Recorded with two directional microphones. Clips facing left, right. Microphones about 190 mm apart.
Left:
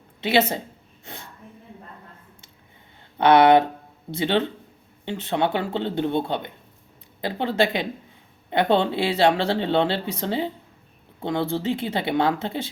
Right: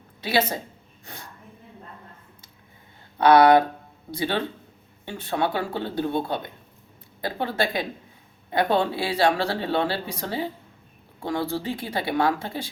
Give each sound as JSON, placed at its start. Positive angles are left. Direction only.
{"t": 0.2, "sound": "speech", "side_deg": 25}
{"t": 3.2, "sound": "speech", "side_deg": 25}